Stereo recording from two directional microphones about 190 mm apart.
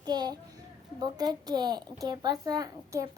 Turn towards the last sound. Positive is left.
turn(degrees=-20)  # may be behind; listen again after turning